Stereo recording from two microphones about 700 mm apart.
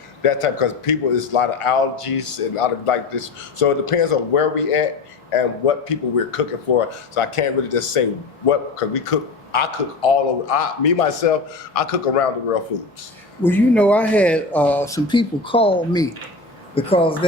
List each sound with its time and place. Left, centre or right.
0.2 s a man's voice: left
13.4 s speech: centre